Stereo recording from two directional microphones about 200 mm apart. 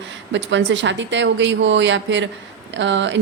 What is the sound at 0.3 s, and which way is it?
Speech, 65° right (ahead or behind).